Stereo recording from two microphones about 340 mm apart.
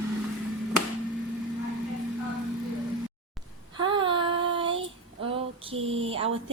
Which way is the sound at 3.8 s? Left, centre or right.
Centre.